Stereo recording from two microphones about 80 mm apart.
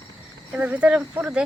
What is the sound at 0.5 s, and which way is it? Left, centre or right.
Speech, centre.